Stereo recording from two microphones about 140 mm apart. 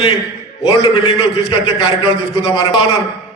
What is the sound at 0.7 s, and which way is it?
A man's voice, 35° left (ahead or behind).